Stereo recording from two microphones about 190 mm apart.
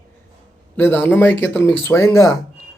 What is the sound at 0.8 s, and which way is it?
Speech, 10° left (ahead or behind).